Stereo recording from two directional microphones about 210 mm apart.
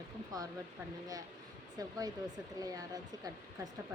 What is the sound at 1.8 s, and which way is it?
Speech, 15° right (ahead or behind).